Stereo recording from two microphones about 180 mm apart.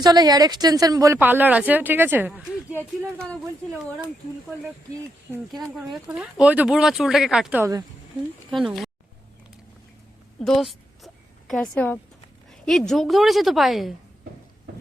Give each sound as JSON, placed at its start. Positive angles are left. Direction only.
{"t": 0.0, "sound": "speech", "side_deg": -20}
{"t": 5.9, "sound": "speech", "side_deg": -5}
{"t": 7.6, "sound": "speech", "side_deg": -15}
{"t": 8.4, "sound": "speech", "side_deg": 0}
{"t": 10.4, "sound": "speech", "side_deg": 0}